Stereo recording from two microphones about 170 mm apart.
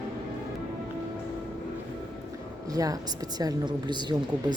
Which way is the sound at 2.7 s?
20° right (ahead or behind).